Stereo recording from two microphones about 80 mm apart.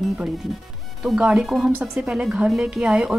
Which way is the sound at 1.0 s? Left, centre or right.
Centre.